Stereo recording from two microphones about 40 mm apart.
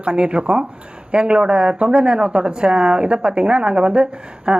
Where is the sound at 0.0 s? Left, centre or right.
Right.